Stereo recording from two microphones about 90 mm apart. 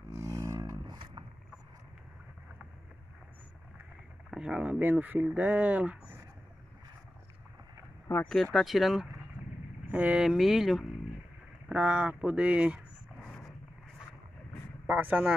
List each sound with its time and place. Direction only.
0.1 s a sound: 35° right (ahead or behind)
0.8 s a sound: 60° right (ahead or behind)
4.3 s speech: 10° right (ahead or behind)
8.1 s a sound: 25° left (ahead or behind)
8.5 s speech: centre (ahead or behind)
9.8 s speech: 15° right (ahead or behind)
10.2 s speech: 5° right (ahead or behind)
11.7 s speech: 15° right (ahead or behind)
13.2 s dog: 10° left (ahead or behind)
15.0 s speech: 20° right (ahead or behind)